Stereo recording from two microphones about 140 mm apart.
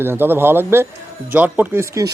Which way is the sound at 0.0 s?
15° right (ahead or behind).